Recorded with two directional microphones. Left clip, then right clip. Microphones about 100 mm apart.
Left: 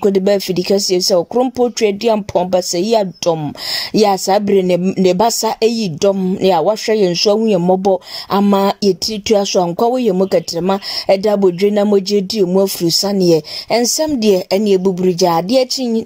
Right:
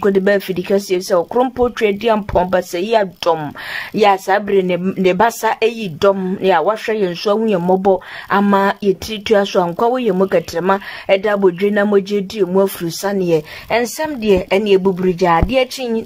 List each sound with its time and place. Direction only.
0.0 s speech: 40° left (ahead or behind)
5.7 s speech: 35° left (ahead or behind)
6.4 s speech: 50° left (ahead or behind)
7.1 s speech: 30° left (ahead or behind)
8.3 s speech: 45° left (ahead or behind)
9.0 s speech: 30° left (ahead or behind)
13.1 s speech: 50° left (ahead or behind)
13.7 s a woman's voice: 75° left (ahead or behind)
15.0 s a woman's voice: 65° left (ahead or behind)